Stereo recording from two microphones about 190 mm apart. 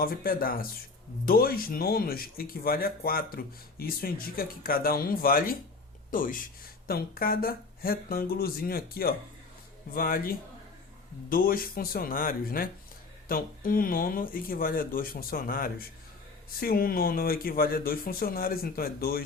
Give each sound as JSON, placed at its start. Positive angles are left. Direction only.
{"t": 0.0, "sound": "speech", "side_deg": 50}